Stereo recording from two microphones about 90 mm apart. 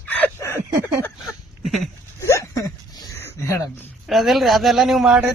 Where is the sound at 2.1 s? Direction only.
30° left (ahead or behind).